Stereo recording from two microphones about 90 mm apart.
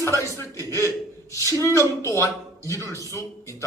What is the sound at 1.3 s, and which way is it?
Speech, 35° right (ahead or behind).